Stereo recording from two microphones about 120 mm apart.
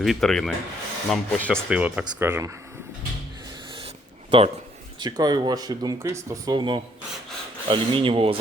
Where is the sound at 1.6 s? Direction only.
10° right (ahead or behind).